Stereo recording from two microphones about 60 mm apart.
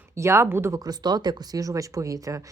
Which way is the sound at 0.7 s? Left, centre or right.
Right.